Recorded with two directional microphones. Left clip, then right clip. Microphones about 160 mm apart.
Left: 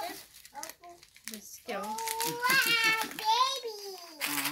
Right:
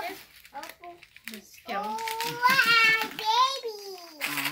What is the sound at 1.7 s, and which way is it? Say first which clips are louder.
Speech: right 4 dB; 70° left (ahead or behind).